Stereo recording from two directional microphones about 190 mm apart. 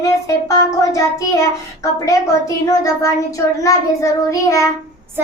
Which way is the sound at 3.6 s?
15° left (ahead or behind).